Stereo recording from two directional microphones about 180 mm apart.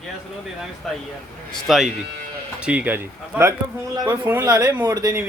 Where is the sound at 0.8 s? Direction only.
Centre (ahead or behind).